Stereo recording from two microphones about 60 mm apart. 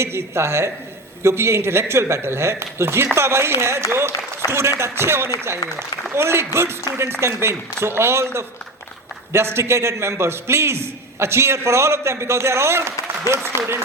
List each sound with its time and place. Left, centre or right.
0.0 s a man's voice: right